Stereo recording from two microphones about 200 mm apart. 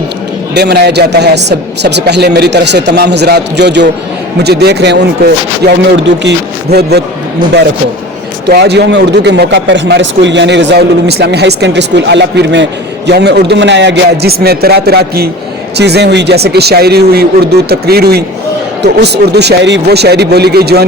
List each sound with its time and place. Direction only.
0.5 s a man's voice: 55° right (ahead or behind)
8.4 s a man's voice: 55° right (ahead or behind)